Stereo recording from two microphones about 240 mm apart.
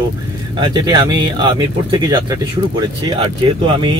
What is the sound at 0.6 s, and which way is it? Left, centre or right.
Speech, centre.